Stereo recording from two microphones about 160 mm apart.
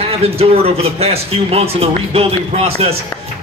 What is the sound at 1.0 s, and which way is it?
Speech, 40° right (ahead or behind).